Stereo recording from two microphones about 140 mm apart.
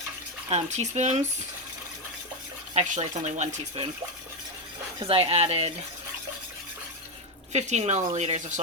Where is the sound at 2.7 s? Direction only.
55° right (ahead or behind).